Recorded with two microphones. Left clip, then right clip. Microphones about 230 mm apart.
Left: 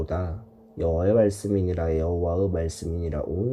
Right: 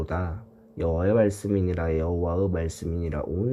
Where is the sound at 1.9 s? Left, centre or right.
Centre.